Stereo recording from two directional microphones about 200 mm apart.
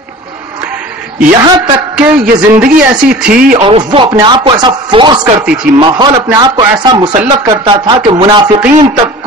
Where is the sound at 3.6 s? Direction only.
25° right (ahead or behind).